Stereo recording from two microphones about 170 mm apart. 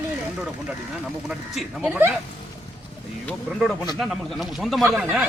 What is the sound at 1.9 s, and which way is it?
Speech, 10° right (ahead or behind).